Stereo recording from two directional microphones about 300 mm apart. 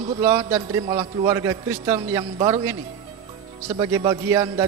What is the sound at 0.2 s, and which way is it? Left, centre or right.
A man's voice, centre.